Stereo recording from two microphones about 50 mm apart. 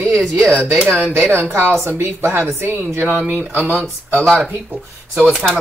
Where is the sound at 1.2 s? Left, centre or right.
Right.